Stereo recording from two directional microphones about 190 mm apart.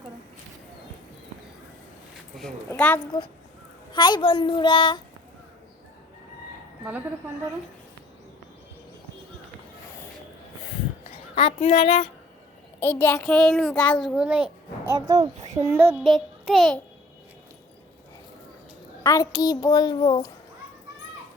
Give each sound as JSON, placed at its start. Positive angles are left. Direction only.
{"t": 2.6, "sound": "a woman's voice", "side_deg": 10}
{"t": 3.9, "sound": "a child's voice", "side_deg": 25}
{"t": 6.8, "sound": "speech", "side_deg": -10}
{"t": 11.3, "sound": "a child's voice", "side_deg": 30}
{"t": 12.8, "sound": "a child's voice", "side_deg": 10}
{"t": 14.8, "sound": "speech", "side_deg": -20}
{"t": 16.0, "sound": "a child's voice", "side_deg": 0}
{"t": 19.0, "sound": "a child's voice", "side_deg": 20}